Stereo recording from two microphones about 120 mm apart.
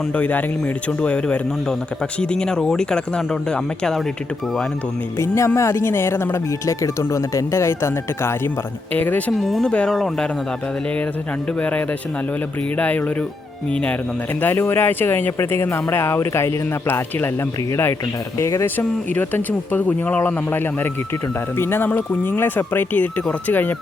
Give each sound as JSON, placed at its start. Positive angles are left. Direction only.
{"t": 0.1, "sound": "speech", "side_deg": 10}
{"t": 5.1, "sound": "speech", "side_deg": 25}
{"t": 9.3, "sound": "speech", "side_deg": 0}
{"t": 11.6, "sound": "speech", "side_deg": 10}